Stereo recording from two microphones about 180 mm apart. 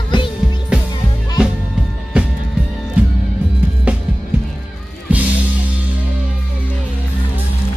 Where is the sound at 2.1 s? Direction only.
5° right (ahead or behind).